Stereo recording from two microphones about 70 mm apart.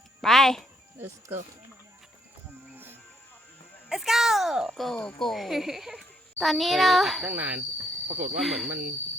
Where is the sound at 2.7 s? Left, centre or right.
Right.